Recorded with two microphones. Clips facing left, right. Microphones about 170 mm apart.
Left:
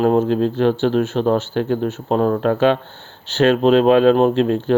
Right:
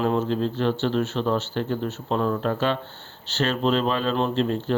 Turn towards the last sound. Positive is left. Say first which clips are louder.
# left 8 dB
turn(degrees=60)  # may be behind; listen again after turning